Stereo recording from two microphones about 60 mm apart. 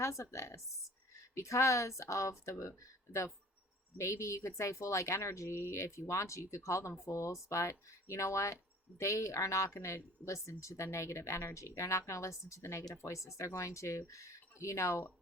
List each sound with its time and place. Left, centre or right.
0.0 s speech: left